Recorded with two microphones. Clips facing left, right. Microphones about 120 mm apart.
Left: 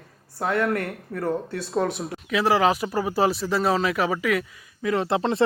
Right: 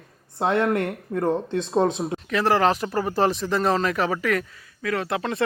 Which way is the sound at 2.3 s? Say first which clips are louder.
Even; 5° left (ahead or behind).